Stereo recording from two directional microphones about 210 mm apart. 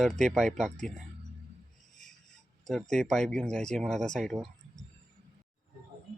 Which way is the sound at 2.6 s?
Centre (ahead or behind).